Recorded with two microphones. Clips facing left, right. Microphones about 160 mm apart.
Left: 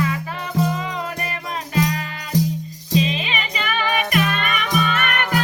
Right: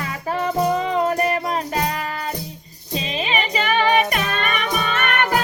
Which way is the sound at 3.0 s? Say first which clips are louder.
Right 1 dB; 35° right (ahead or behind).